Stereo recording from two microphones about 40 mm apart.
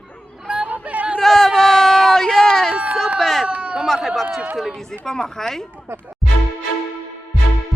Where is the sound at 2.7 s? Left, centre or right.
Right.